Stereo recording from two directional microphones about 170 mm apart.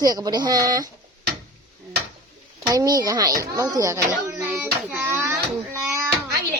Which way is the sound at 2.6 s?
20° right (ahead or behind).